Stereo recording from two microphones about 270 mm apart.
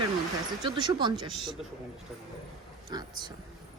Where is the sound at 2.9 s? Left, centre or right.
Centre.